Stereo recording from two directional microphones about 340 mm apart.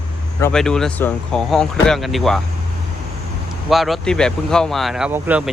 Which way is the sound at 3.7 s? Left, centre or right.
Centre.